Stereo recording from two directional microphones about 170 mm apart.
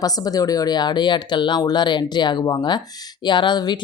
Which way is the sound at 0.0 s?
20° left (ahead or behind).